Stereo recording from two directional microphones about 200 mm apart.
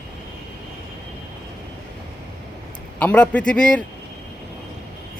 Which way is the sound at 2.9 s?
5° left (ahead or behind).